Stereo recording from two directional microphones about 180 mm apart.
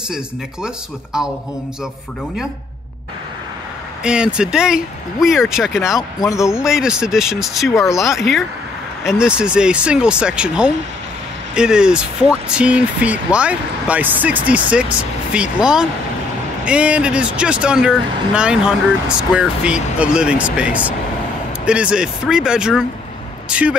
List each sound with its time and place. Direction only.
4.0 s speech: 5° right (ahead or behind)
5.8 s speech: 15° left (ahead or behind)
6.6 s speech: 5° right (ahead or behind)
7.7 s speech: 15° left (ahead or behind)
8.2 s speech: centre (ahead or behind)